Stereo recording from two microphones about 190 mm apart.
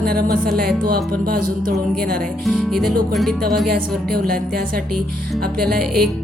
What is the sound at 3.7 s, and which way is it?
A woman's voice, 50° right (ahead or behind).